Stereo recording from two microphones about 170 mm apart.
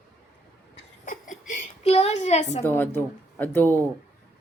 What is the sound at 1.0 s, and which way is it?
Chuckle, 50° left (ahead or behind).